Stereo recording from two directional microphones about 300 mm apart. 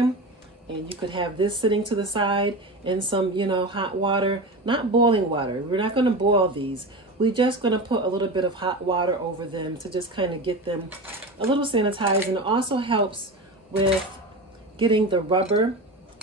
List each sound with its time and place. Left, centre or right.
0.8 s speech: centre
14.8 s speech: centre